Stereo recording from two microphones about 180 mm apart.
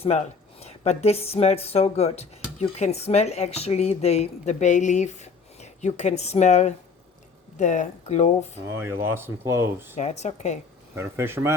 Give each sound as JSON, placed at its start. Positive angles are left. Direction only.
{"t": 0.0, "sound": "speech", "side_deg": 35}
{"t": 8.6, "sound": "speech", "side_deg": -15}
{"t": 10.0, "sound": "speech", "side_deg": 40}
{"t": 10.9, "sound": "speech", "side_deg": -15}